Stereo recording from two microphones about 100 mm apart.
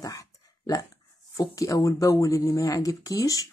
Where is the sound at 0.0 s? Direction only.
35° left (ahead or behind).